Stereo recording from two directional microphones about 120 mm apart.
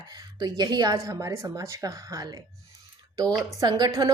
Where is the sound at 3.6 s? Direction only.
35° right (ahead or behind).